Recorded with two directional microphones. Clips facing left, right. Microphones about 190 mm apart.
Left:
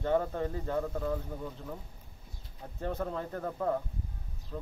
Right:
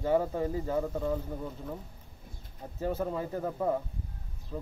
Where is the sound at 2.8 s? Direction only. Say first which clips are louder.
Right 3 dB; 5° right (ahead or behind).